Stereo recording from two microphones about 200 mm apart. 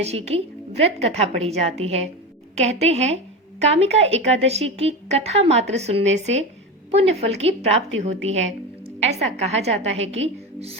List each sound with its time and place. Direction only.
0.0 s a woman's voice: 30° right (ahead or behind)